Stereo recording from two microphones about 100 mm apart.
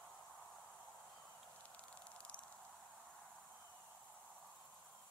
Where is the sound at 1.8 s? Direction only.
10° left (ahead or behind).